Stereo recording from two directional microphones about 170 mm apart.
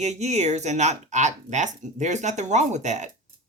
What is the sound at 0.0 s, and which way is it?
Speech, 40° right (ahead or behind).